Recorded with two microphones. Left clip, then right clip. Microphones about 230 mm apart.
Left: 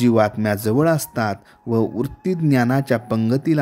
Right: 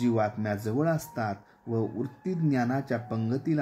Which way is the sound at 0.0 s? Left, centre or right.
Left.